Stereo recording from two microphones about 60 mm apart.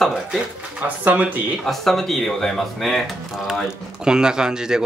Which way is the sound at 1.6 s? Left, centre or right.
Centre.